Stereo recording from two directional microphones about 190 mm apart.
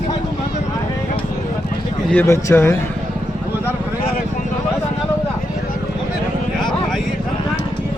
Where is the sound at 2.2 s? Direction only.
15° left (ahead or behind).